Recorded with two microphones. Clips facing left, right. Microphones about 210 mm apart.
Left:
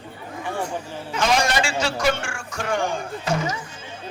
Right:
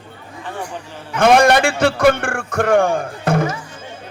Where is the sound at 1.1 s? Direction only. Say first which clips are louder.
Right 9 dB; 55° right (ahead or behind).